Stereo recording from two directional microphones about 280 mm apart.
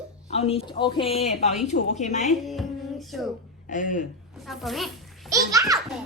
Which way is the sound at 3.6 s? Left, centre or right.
Left.